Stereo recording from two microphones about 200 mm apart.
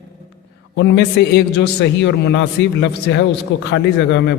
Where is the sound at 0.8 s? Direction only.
60° left (ahead or behind).